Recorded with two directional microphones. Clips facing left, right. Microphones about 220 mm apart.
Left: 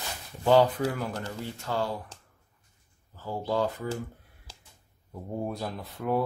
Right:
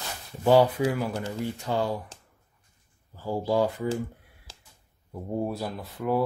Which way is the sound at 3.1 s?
10° right (ahead or behind).